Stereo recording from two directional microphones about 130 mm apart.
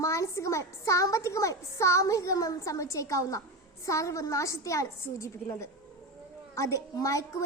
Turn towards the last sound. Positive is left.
turn(degrees=25)  # may be behind; listen again after turning